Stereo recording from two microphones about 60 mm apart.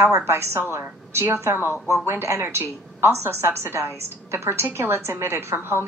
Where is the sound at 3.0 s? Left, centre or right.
Right.